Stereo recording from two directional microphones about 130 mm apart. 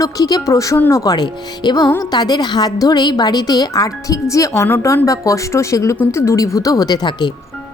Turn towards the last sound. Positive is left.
turn(degrees=35)  # may be behind; listen again after turning